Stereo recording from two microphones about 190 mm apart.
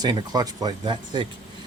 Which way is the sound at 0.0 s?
20° right (ahead or behind).